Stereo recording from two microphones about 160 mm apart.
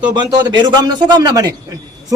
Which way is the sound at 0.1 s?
25° right (ahead or behind).